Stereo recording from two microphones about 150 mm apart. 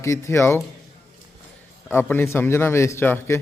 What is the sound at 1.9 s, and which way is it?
A man's voice, 15° left (ahead or behind).